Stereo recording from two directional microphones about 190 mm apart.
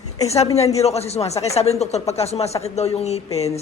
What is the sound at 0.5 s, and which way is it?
Speech, 35° left (ahead or behind).